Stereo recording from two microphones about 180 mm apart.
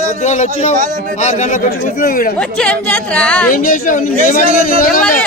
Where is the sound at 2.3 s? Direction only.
5° left (ahead or behind).